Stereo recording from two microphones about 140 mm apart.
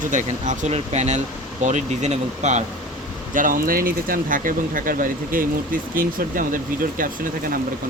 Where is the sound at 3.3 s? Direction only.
75° right (ahead or behind).